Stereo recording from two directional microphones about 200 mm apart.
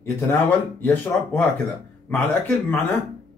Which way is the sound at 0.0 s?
10° left (ahead or behind).